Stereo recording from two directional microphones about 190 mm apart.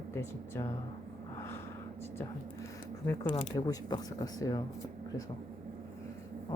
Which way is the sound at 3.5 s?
20° left (ahead or behind).